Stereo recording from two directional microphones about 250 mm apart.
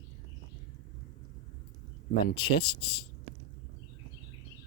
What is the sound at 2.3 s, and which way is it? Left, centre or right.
Speech, left.